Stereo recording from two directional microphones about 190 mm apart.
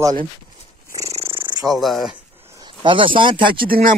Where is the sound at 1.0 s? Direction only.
35° right (ahead or behind).